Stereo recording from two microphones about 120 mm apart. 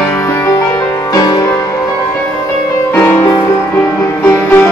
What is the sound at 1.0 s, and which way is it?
Music, 30° left (ahead or behind).